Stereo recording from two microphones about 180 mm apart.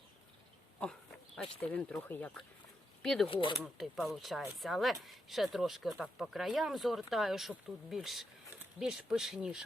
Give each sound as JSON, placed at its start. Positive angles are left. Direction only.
{"t": 1.6, "sound": "speech", "side_deg": 5}